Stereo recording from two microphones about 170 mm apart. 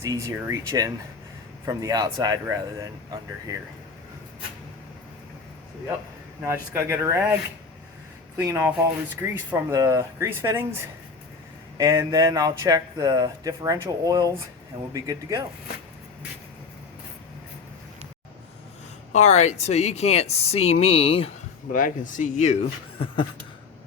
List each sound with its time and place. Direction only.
0.0 s speech: 20° right (ahead or behind)
6.4 s speech: 15° right (ahead or behind)
8.4 s speech: 15° right (ahead or behind)
11.8 s speech: 20° right (ahead or behind)
19.1 s speech: 40° left (ahead or behind)
21.7 s speech: 50° left (ahead or behind)